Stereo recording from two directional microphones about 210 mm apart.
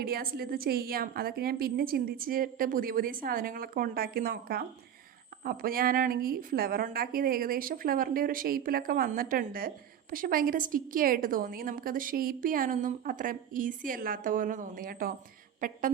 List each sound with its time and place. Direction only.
0.0 s a woman's voice: 45° right (ahead or behind)